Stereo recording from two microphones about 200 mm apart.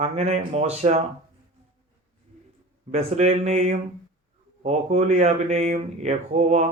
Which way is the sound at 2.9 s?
30° right (ahead or behind).